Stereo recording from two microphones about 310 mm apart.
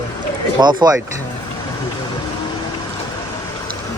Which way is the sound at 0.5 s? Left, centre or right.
Centre.